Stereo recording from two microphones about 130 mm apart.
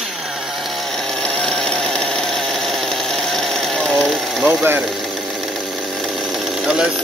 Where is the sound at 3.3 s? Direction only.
5° left (ahead or behind).